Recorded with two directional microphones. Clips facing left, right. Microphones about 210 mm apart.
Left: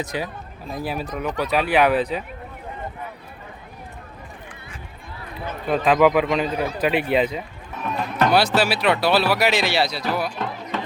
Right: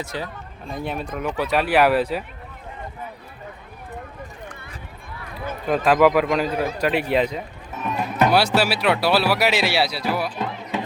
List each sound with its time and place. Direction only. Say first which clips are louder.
0.0 s speech: left 3 dB; 15° left (ahead or behind)
0.6 s a man's voice: left 1 dB; 5° left (ahead or behind)
5.6 s a man's voice: even; centre (ahead or behind)
7.9 s speech: right 1 dB; 10° right (ahead or behind)